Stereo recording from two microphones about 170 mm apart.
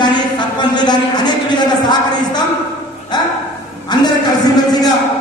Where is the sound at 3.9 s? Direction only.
25° left (ahead or behind).